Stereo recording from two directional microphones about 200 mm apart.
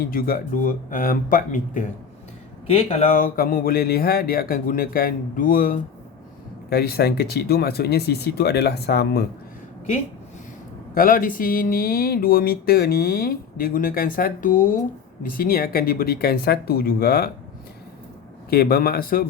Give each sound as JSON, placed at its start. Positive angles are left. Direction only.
{"t": 0.0, "sound": "speech", "side_deg": 45}
{"t": 2.6, "sound": "speech", "side_deg": 30}
{"t": 10.9, "sound": "speech", "side_deg": 45}
{"t": 18.5, "sound": "speech", "side_deg": 50}